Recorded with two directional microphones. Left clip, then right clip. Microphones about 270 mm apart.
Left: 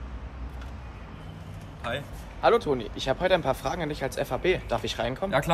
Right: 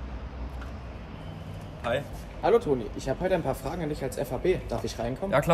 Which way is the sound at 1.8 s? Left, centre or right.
Centre.